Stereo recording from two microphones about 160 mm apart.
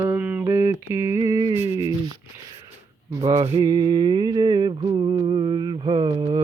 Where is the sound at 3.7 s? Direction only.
25° right (ahead or behind).